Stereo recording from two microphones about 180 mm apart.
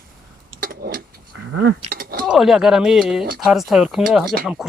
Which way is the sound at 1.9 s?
55° right (ahead or behind).